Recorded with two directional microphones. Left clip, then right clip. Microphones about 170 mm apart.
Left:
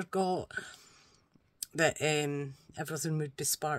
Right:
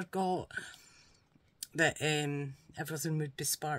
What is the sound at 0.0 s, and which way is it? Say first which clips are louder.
Speech: left 2 dB; 25° left (ahead or behind).